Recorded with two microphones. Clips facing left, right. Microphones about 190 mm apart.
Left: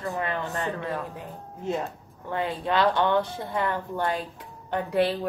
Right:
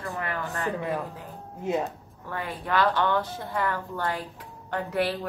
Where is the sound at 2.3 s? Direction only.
20° left (ahead or behind).